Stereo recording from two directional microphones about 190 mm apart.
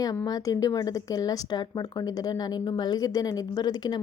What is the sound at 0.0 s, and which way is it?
A woman's voice, 20° left (ahead or behind).